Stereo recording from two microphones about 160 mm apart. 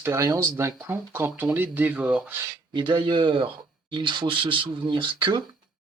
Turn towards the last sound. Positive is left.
turn(degrees=-30)  # may be behind; listen again after turning